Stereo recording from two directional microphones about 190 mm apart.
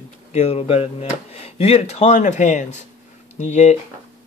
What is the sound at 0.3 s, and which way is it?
Speech, 35° left (ahead or behind).